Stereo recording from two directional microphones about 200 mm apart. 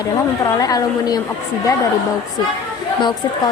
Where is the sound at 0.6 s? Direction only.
20° left (ahead or behind).